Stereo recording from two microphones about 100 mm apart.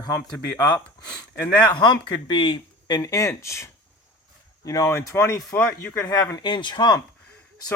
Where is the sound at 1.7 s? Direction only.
50° left (ahead or behind).